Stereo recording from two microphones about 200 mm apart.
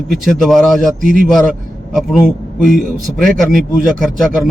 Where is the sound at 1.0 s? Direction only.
40° right (ahead or behind).